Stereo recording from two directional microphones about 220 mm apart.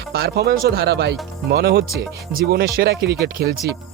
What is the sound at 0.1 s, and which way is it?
Speech, 45° right (ahead or behind).